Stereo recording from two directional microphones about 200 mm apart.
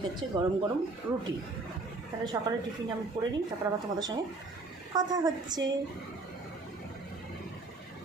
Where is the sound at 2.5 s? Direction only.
20° right (ahead or behind).